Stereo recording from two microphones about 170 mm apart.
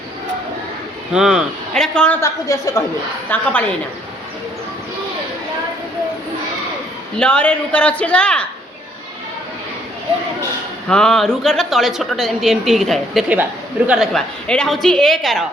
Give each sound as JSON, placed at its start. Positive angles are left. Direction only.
{"t": 1.1, "sound": "a woman's voice", "side_deg": -5}
{"t": 2.2, "sound": "a woman's voice", "side_deg": 20}
{"t": 3.2, "sound": "a man's voice", "side_deg": 10}
{"t": 7.2, "sound": "a man's voice", "side_deg": 5}
{"t": 10.8, "sound": "a woman's voice", "side_deg": 5}